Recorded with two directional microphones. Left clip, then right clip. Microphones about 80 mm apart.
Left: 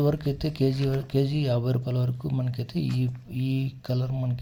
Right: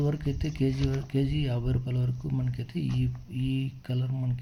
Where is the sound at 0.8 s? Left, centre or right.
Centre.